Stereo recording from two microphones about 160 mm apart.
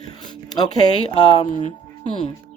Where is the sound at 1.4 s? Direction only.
50° left (ahead or behind).